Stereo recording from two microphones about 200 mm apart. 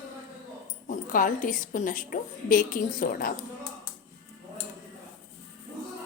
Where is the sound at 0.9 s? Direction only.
40° left (ahead or behind).